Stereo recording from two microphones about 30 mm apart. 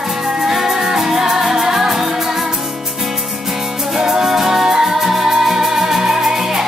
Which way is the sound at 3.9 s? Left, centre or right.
Centre.